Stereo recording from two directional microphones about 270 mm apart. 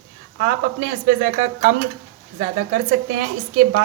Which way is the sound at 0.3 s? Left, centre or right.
Right.